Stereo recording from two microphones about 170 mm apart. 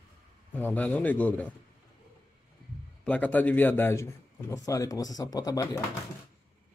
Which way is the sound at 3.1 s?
10° left (ahead or behind).